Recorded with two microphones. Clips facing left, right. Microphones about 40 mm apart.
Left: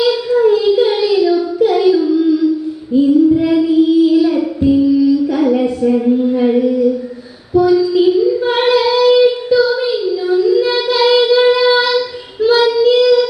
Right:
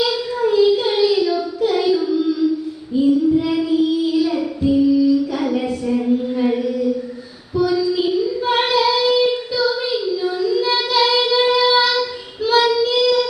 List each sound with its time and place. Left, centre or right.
0.0 s child singing: centre
12.9 s music: centre